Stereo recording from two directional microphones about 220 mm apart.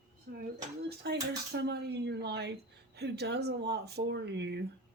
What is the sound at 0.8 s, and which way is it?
Speech, 45° right (ahead or behind).